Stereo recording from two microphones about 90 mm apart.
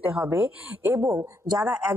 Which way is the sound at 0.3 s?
20° right (ahead or behind).